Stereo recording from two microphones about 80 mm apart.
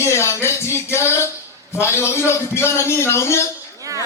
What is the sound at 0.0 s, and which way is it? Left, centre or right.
A man's voice, left.